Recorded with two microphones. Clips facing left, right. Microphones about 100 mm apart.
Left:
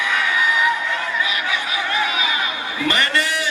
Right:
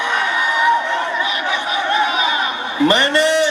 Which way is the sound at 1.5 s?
25° right (ahead or behind).